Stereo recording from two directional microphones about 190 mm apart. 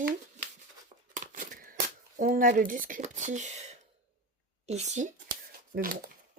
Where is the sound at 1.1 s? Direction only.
45° right (ahead or behind).